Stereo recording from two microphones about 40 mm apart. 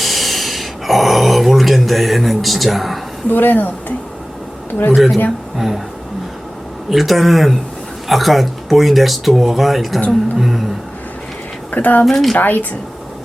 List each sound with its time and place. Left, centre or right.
0.0 s a sound: centre
3.2 s speech: left
5.5 s speech: centre
6.9 s speech: centre
10.3 s a sound: centre
11.7 s speech: left
12.0 s speech: centre
12.4 s speech: left